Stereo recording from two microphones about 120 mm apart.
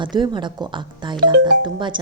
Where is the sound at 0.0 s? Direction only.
40° right (ahead or behind).